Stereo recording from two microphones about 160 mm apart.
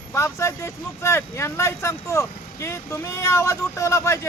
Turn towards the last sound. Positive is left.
turn(degrees=20)  # may be behind; listen again after turning